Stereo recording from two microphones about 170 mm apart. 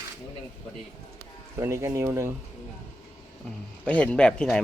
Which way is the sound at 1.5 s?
15° right (ahead or behind).